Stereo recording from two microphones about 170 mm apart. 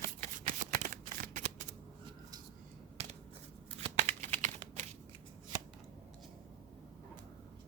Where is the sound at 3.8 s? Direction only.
35° right (ahead or behind).